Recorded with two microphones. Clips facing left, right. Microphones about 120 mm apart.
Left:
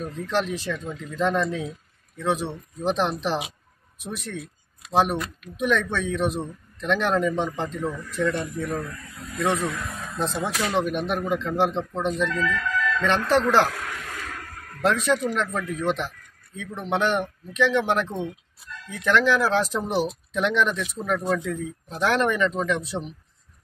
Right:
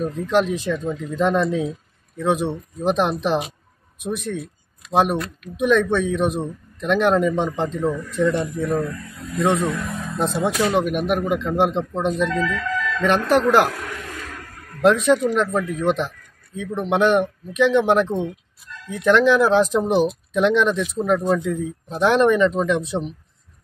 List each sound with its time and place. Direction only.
0.0 s a man's voice: 15° right (ahead or behind)
5.1 s speech: centre (ahead or behind)
5.6 s a man's voice: 20° right (ahead or behind)
14.8 s a man's voice: 20° right (ahead or behind)